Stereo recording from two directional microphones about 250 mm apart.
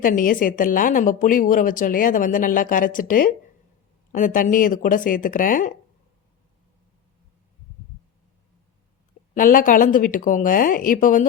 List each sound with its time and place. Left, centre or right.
0.0 s a woman's voice: left
9.3 s a woman's voice: left